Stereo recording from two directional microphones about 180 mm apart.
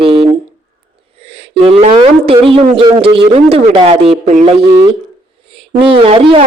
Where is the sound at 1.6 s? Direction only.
30° right (ahead or behind).